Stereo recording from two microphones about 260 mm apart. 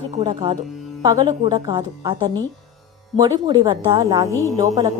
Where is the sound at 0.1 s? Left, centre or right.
Right.